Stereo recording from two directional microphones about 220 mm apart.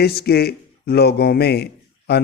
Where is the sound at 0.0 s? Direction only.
45° left (ahead or behind).